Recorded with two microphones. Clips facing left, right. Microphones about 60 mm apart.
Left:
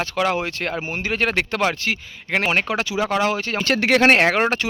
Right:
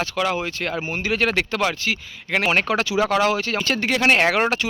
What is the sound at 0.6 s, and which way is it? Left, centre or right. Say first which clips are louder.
Speech: even; left.